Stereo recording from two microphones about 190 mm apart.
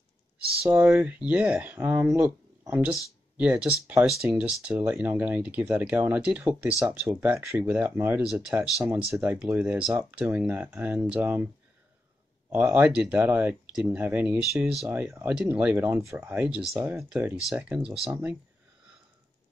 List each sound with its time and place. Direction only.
0.7 s speech: 10° right (ahead or behind)
12.4 s speech: 10° right (ahead or behind)